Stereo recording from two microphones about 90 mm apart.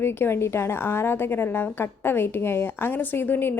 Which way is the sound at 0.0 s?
25° left (ahead or behind).